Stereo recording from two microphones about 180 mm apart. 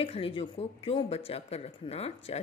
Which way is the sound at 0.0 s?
30° left (ahead or behind).